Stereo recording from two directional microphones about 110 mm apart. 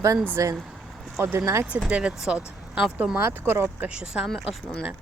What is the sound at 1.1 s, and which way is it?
Speech, 20° right (ahead or behind).